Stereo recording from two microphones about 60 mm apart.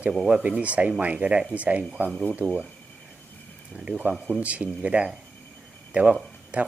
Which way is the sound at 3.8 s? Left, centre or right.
Centre.